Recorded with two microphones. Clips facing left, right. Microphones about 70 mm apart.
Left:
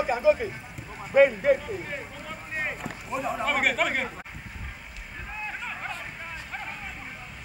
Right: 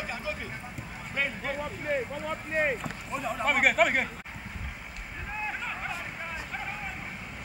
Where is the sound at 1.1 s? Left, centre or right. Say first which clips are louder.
Left 14 dB; left.